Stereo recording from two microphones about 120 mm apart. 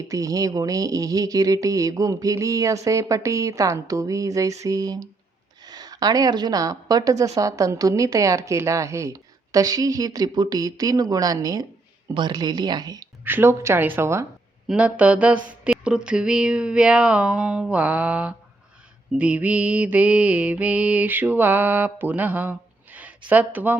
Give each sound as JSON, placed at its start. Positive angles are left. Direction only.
{"t": 0.1, "sound": "a woman's voice", "side_deg": -30}
{"t": 13.2, "sound": "speech", "side_deg": -20}
{"t": 14.7, "sound": "mantra", "side_deg": -10}